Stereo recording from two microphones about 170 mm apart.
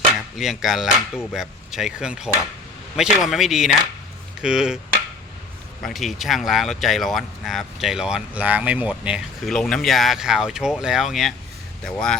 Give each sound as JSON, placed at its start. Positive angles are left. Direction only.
{"t": 0.3, "sound": "speech", "side_deg": 0}
{"t": 4.4, "sound": "chop", "side_deg": -5}
{"t": 5.8, "sound": "speech", "side_deg": 0}